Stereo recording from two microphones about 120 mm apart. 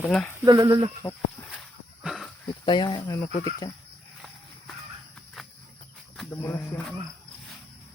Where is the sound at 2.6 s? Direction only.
40° left (ahead or behind).